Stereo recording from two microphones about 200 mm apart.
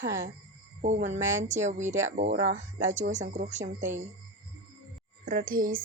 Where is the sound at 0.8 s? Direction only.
40° right (ahead or behind).